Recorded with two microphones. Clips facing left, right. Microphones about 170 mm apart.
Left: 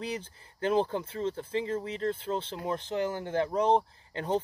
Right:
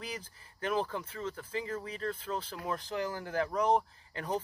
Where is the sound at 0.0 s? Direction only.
30° left (ahead or behind).